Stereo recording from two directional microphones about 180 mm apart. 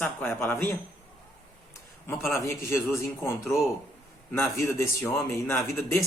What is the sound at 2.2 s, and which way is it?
Speech, 15° left (ahead or behind).